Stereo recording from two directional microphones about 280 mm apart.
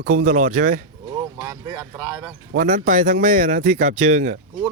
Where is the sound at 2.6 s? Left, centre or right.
Right.